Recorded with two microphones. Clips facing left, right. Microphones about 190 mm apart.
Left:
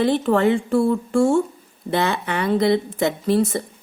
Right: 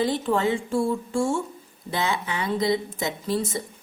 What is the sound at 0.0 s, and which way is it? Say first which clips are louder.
A woman's voice: left 6 dB; 60° left (ahead or behind).